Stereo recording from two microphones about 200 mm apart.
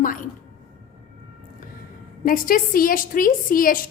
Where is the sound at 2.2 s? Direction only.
45° left (ahead or behind).